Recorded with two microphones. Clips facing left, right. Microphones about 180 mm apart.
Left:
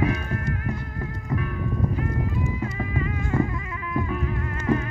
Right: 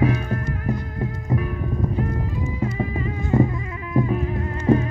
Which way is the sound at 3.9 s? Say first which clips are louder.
Right 6 dB; 35° right (ahead or behind).